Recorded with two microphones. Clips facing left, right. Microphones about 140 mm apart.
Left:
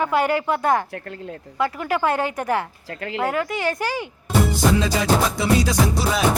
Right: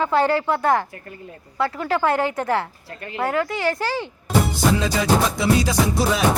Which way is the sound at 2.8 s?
90° left.